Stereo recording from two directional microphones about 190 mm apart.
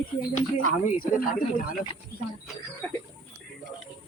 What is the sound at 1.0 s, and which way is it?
Speech, 50° left (ahead or behind).